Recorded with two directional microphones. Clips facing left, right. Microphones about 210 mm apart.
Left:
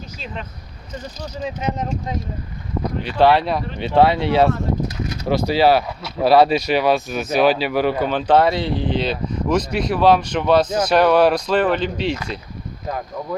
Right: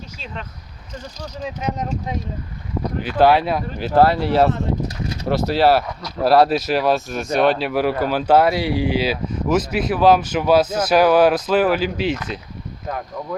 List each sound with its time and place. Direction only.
1.5 s speech: centre (ahead or behind)